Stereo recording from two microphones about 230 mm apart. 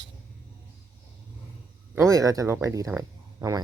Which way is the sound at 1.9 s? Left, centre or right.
Centre.